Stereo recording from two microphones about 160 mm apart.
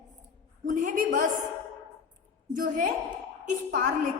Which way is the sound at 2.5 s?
55° right (ahead or behind).